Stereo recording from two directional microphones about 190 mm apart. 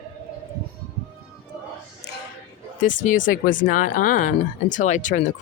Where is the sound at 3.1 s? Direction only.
45° left (ahead or behind).